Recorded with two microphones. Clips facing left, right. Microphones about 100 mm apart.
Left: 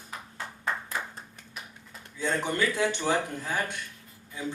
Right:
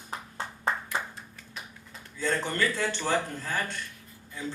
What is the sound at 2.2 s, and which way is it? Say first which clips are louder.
A man's voice: even; 15° left (ahead or behind).